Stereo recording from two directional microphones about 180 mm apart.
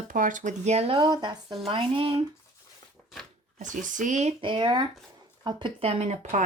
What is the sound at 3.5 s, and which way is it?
Speech, 45° right (ahead or behind).